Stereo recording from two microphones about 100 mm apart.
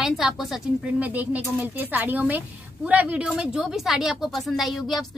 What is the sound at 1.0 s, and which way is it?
Speech, 15° right (ahead or behind).